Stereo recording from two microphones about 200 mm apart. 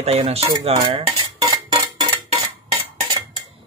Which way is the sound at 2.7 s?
20° right (ahead or behind).